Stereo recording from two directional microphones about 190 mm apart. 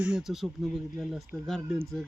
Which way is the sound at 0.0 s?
5° right (ahead or behind).